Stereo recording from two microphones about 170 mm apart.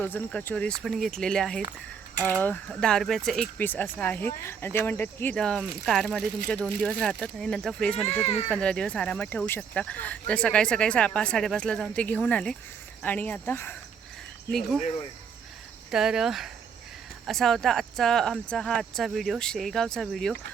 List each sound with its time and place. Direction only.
0.0 s speech: 10° left (ahead or behind)
2.6 s speech: centre (ahead or behind)
8.2 s speech: 40° left (ahead or behind)
8.4 s speech: 5° left (ahead or behind)
15.9 s speech: 5° right (ahead or behind)